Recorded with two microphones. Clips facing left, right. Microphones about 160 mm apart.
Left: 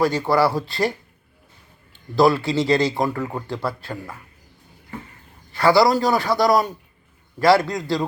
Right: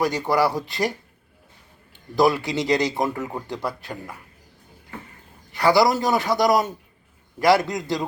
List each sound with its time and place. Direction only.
0.0 s speech: 15° right (ahead or behind)
2.1 s a man's voice: 20° right (ahead or behind)
5.5 s a man's voice: 20° right (ahead or behind)